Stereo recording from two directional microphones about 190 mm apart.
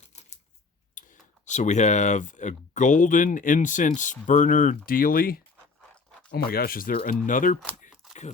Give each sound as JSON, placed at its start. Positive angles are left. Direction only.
{"t": 0.1, "sound": "typewriter", "side_deg": 35}
{"t": 1.5, "sound": "speech", "side_deg": 40}
{"t": 5.9, "sound": "a sound", "side_deg": 5}
{"t": 6.3, "sound": "speech", "side_deg": 55}